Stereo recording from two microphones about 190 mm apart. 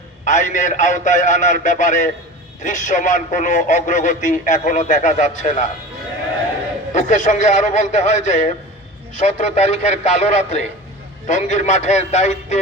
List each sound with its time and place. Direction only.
0.3 s speech: 40° left (ahead or behind)
6.9 s speech: 40° left (ahead or behind)